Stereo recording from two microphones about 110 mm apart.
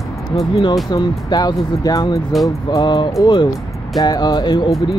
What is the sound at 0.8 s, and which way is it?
Speech, 40° left (ahead or behind).